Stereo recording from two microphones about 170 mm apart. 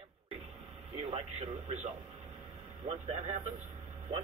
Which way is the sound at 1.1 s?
40° right (ahead or behind).